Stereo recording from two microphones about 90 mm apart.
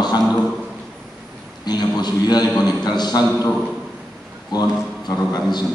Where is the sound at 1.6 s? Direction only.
50° left (ahead or behind).